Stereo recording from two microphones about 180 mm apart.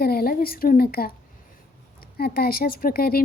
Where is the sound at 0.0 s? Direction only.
60° left (ahead or behind).